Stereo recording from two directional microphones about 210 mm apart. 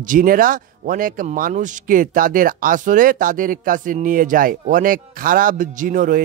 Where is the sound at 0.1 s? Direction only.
40° right (ahead or behind).